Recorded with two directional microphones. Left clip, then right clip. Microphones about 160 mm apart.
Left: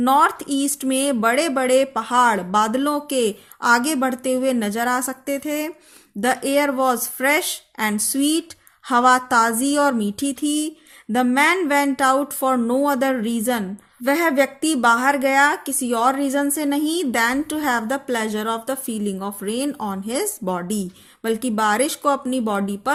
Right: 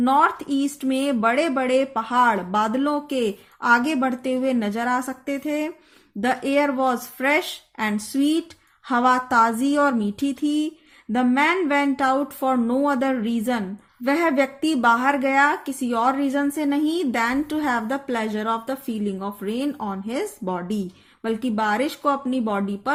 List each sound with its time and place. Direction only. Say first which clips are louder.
0.0 s speech: left 2 dB; 25° left (ahead or behind)